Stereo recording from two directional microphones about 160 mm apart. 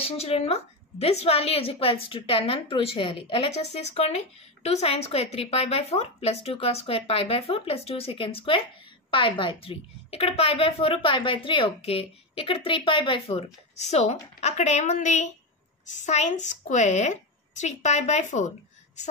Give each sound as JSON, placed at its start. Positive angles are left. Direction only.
{"t": 0.0, "sound": "a woman's voice", "side_deg": 40}
{"t": 13.7, "sound": "a woman's voice", "side_deg": 45}